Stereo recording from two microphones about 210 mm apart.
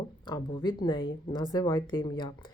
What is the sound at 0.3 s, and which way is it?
Speech, 20° left (ahead or behind).